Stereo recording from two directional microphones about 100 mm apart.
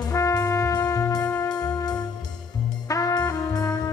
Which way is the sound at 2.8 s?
35° left (ahead or behind).